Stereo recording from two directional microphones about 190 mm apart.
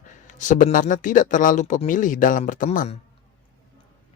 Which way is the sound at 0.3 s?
40° left (ahead or behind).